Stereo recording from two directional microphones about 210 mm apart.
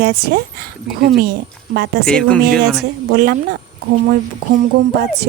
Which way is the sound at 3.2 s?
50° right (ahead or behind).